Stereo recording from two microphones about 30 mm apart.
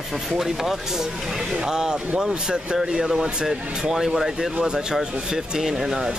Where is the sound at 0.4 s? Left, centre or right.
Centre.